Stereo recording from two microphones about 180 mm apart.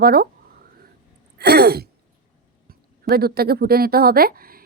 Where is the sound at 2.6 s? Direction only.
60° right (ahead or behind).